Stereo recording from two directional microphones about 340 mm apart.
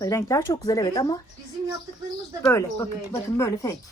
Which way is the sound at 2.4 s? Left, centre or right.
Centre.